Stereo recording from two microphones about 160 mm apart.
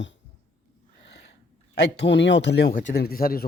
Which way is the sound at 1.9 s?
90° left.